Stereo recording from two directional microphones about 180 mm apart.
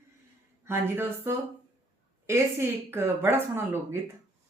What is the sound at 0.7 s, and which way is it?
Speech, 15° right (ahead or behind).